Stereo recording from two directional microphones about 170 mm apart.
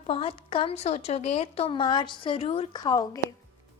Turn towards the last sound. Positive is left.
turn(degrees=20)  # may be behind; listen again after turning